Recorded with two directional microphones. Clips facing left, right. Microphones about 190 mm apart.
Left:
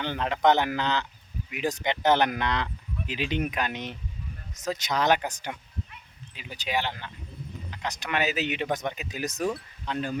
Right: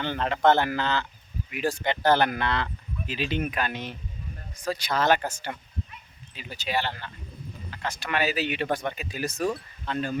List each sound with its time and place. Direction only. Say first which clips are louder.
0.0 s speech: right 1 dB; 15° left (ahead or behind)